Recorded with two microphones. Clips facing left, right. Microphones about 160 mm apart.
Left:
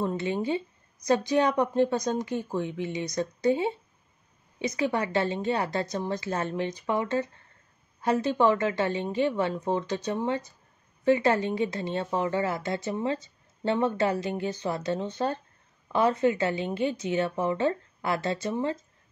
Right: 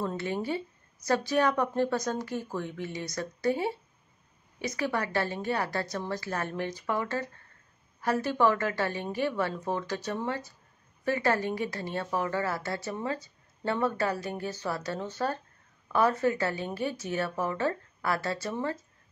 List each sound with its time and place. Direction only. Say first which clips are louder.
0.0 s a woman's voice: left 3 dB; 20° left (ahead or behind)